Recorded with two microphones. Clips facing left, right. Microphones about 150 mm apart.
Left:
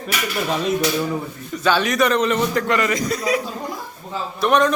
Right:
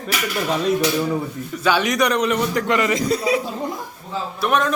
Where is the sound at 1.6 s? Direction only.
15° right (ahead or behind).